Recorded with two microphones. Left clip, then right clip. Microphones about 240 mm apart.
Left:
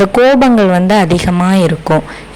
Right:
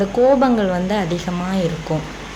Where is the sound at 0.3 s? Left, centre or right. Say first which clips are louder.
Left 7 dB; left.